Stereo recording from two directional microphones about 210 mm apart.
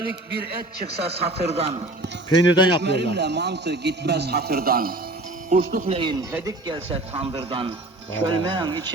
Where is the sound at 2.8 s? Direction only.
55° right (ahead or behind).